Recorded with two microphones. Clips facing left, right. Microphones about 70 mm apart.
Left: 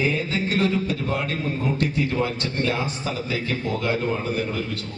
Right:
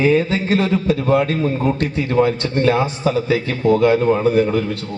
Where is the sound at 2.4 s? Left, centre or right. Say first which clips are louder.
Right 8 dB; right.